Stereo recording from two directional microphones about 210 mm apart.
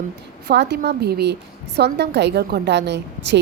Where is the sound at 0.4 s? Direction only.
50° right (ahead or behind).